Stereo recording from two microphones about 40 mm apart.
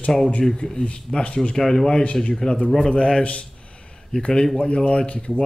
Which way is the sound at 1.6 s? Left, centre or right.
Centre.